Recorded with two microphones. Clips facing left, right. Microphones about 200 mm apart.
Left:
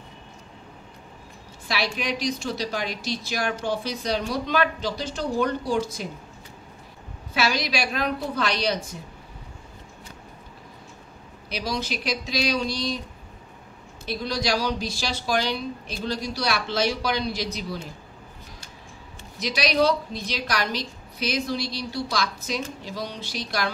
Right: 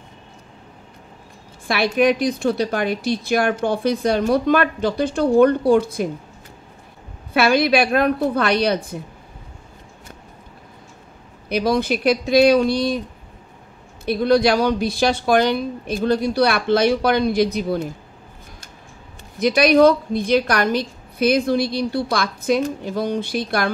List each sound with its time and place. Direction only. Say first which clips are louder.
1.7 s a woman's voice: right 11 dB; 55° right (ahead or behind)
7.3 s a woman's voice: right 10 dB; 55° right (ahead or behind)
11.4 s a woman's voice: right 10 dB; 55° right (ahead or behind)
14.0 s a woman's voice: right 11 dB; 55° right (ahead or behind)
19.3 s a woman's voice: right 10 dB; 55° right (ahead or behind)